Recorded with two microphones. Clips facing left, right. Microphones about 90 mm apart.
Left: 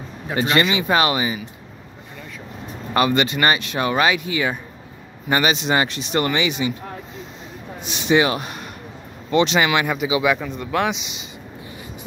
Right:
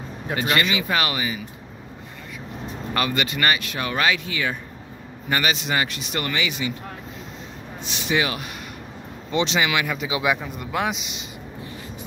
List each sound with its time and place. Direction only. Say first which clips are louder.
0.4 s speech: left 4 dB; 30° left (ahead or behind)
2.9 s speech: left 6 dB; 25° left (ahead or behind)
8.1 s speech: left 6 dB; 30° left (ahead or behind)
9.3 s speech: left 5 dB; 55° left (ahead or behind)
9.7 s speech: left 4 dB; 30° left (ahead or behind)
9.9 s speech: left 6 dB; 5° left (ahead or behind)
10.4 s speech: left 4 dB; 5° right (ahead or behind)